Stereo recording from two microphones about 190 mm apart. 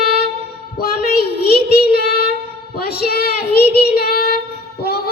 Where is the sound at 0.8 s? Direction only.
55° left (ahead or behind).